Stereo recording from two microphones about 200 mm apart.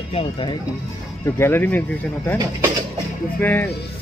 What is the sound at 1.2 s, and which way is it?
Speech, 10° left (ahead or behind).